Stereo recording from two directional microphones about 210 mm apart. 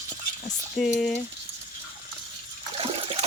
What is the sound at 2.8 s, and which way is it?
Water, 25° right (ahead or behind).